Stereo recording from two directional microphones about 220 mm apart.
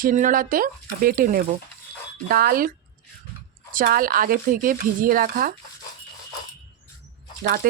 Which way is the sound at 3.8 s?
40° right (ahead or behind).